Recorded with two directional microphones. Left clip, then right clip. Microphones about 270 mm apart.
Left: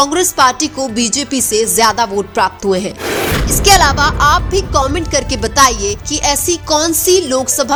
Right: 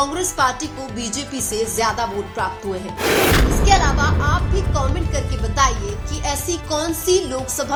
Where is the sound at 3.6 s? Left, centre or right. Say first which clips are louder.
Left 10 dB; left.